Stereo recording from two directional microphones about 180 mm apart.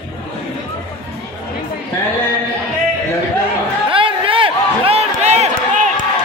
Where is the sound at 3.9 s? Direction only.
30° right (ahead or behind).